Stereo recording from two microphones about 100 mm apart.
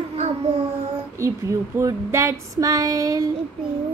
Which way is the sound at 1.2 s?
30° right (ahead or behind).